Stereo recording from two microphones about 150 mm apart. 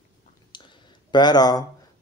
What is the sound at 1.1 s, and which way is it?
Speech, 30° left (ahead or behind).